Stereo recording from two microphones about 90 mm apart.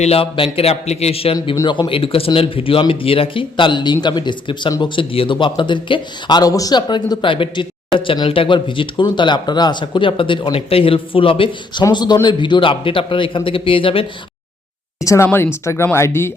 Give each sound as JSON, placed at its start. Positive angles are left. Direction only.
{"t": 0.2, "sound": "speech", "side_deg": 90}
{"t": 4.8, "sound": "a man's voice", "side_deg": 70}
{"t": 11.8, "sound": "speech", "side_deg": 50}
{"t": 15.0, "sound": "speech", "side_deg": 35}